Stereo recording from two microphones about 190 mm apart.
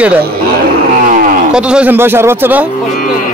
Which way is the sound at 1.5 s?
5° right (ahead or behind).